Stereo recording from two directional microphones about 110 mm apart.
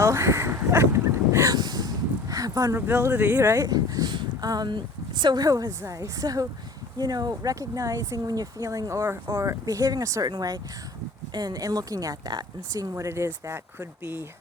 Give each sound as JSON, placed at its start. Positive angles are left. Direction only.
{"t": 0.0, "sound": "quack", "side_deg": -25}
{"t": 2.7, "sound": "speech", "side_deg": -20}
{"t": 3.6, "sound": "speech", "side_deg": -35}